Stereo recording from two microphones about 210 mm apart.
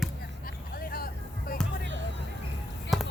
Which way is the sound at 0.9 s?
45° left (ahead or behind).